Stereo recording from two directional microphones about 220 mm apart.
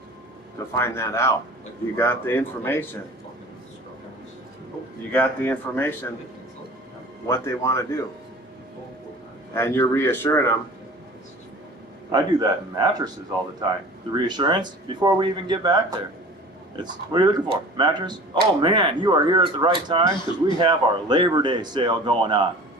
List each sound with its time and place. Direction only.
0.7 s speech: 10° left (ahead or behind)
5.1 s speech: 10° left (ahead or behind)
7.3 s speech: 10° left (ahead or behind)
9.6 s speech: 10° left (ahead or behind)
12.1 s speech: 20° right (ahead or behind)